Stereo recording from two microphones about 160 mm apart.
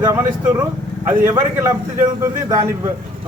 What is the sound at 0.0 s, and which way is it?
Speech, 15° right (ahead or behind).